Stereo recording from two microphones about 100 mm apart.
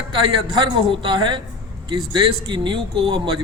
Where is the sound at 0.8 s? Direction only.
55° right (ahead or behind).